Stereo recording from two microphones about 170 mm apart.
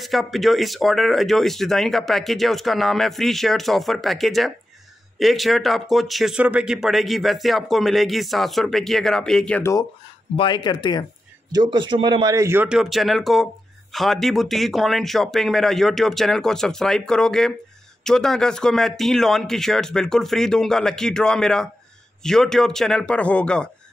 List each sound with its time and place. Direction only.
0.0 s speech: centre (ahead or behind)
9.6 s speech: 15° left (ahead or behind)
10.3 s speech: 30° left (ahead or behind)
11.5 s a man's voice: 25° right (ahead or behind); by 23.7 s 5° left (ahead or behind)